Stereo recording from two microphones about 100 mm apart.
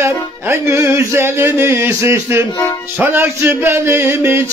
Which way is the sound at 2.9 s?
25° right (ahead or behind).